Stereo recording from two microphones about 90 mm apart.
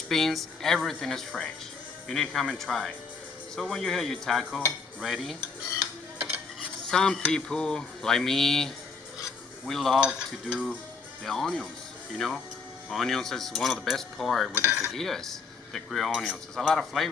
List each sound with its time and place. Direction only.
0.1 s speech: centre (ahead or behind)
6.1 s stir: 25° right (ahead or behind)
6.9 s a sound: 5° left (ahead or behind)
9.9 s cutlery: 10° right (ahead or behind)
11.2 s speech: 5° left (ahead or behind)
12.9 s speech: 5° left (ahead or behind)